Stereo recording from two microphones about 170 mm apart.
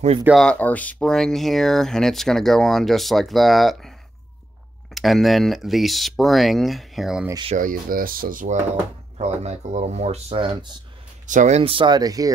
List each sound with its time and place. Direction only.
0.2 s speech: centre (ahead or behind)
4.9 s speech: centre (ahead or behind)
7.5 s speech: 55° right (ahead or behind)
9.2 s speech: 40° right (ahead or behind)
11.2 s speech: 45° right (ahead or behind); by 12.3 s 20° right (ahead or behind)